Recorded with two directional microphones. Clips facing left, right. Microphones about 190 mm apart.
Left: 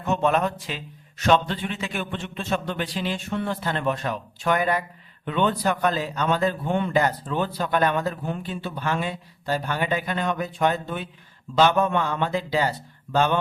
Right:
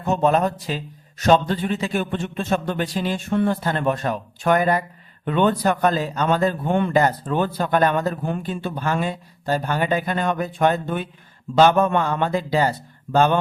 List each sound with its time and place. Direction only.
0.0 s speech: 35° right (ahead or behind)